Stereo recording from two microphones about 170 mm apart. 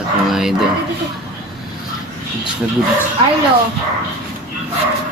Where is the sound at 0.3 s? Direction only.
Centre (ahead or behind).